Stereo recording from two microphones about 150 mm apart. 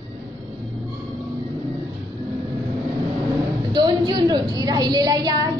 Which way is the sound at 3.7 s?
30° right (ahead or behind).